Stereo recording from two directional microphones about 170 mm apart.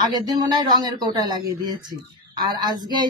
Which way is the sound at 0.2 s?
25° right (ahead or behind).